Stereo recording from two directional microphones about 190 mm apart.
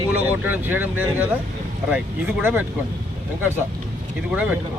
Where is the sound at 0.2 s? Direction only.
10° right (ahead or behind).